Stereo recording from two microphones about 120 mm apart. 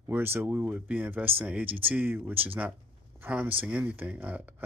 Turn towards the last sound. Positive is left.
turn(degrees=-15)  # may be behind; listen again after turning